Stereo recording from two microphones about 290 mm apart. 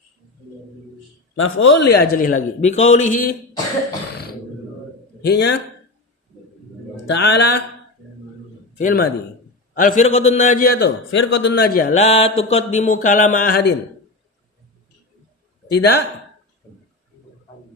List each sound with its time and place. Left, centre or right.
1.4 s a man's voice: left
5.2 s a man's voice: left
6.9 s speech: left
8.8 s a man's voice: left
15.7 s a man's voice: left